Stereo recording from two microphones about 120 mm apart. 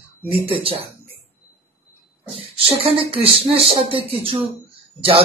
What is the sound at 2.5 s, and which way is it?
A man's voice, 50° right (ahead or behind).